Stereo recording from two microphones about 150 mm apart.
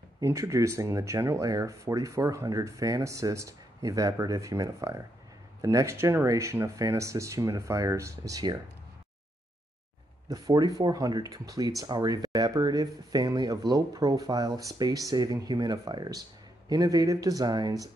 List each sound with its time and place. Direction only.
0.2 s speech: 20° right (ahead or behind)
10.3 s speech: 25° right (ahead or behind)